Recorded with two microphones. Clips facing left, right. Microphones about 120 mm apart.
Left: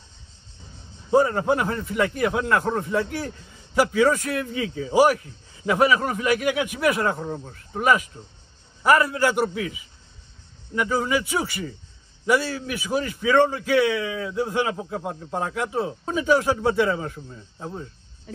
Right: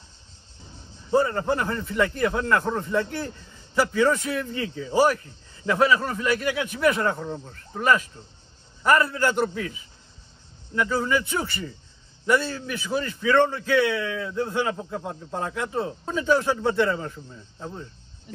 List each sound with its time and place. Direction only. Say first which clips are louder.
1.1 s a man's voice: left 3 dB; 15° left (ahead or behind)
7.2 s a man's voice: left 2 dB; 20° left (ahead or behind)